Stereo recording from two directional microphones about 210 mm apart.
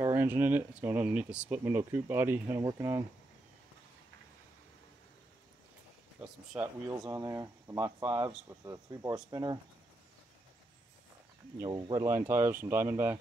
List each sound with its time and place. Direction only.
0.0 s speech: 10° right (ahead or behind)
6.2 s speech: 5° right (ahead or behind)
7.0 s speech: 15° right (ahead or behind)
11.5 s speech: 15° right (ahead or behind)